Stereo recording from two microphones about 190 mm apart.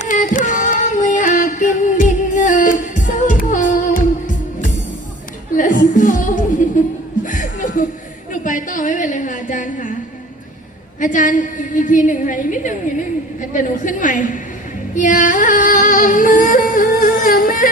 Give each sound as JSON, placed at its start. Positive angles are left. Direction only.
{"t": 0.0, "sound": "a sound", "side_deg": 45}
{"t": 5.5, "sound": "music", "side_deg": 45}
{"t": 7.3, "sound": "chuckle", "side_deg": 45}
{"t": 8.4, "sound": "a sound", "side_deg": 45}
{"t": 11.0, "sound": "a woman's voice", "side_deg": 45}
{"t": 14.9, "sound": "music", "side_deg": 45}